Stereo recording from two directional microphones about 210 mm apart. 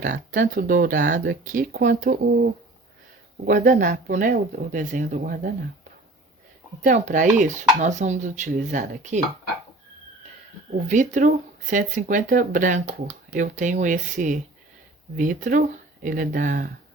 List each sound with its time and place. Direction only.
0.0 s speech: 40° right (ahead or behind)
6.8 s speech: 40° right (ahead or behind)
10.8 s speech: 35° right (ahead or behind)